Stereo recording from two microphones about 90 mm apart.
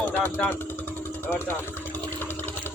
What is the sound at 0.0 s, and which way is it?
Vehicle, 20° left (ahead or behind).